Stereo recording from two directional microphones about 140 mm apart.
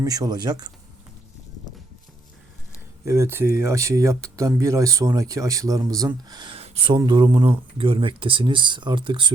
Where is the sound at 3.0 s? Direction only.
20° right (ahead or behind).